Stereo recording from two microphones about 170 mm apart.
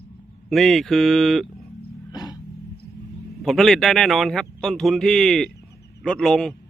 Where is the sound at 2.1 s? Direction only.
20° left (ahead or behind).